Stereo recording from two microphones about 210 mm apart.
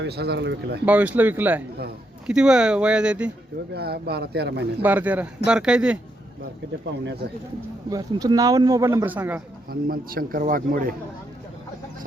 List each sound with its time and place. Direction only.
0.0 s a man's voice: 50° right (ahead or behind)
0.9 s a man's voice: 5° right (ahead or behind)
3.8 s a man's voice: 50° right (ahead or behind)
4.8 s a man's voice: 10° right (ahead or behind)
7.9 s a man's voice: 15° right (ahead or behind)
9.6 s a man's voice: 45° right (ahead or behind)